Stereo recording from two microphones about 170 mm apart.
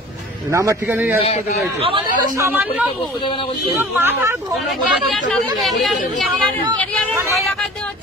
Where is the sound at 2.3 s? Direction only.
15° right (ahead or behind).